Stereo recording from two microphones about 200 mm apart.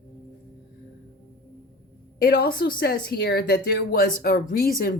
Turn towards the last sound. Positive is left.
turn(degrees=45)  # may be behind; listen again after turning